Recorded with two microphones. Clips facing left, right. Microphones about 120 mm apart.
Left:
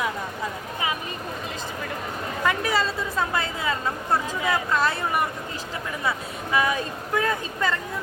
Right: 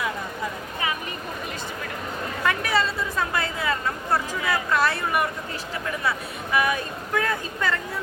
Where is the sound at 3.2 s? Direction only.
20° left (ahead or behind).